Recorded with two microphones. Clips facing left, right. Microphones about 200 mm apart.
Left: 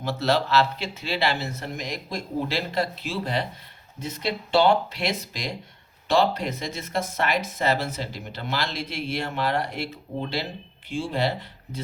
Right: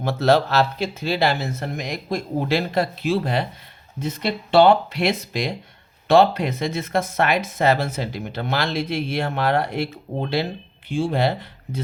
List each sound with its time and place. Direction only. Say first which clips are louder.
0.0 s speech: right 6 dB; 50° right (ahead or behind)